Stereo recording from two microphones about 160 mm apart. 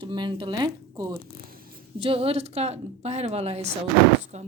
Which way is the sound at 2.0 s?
35° right (ahead or behind).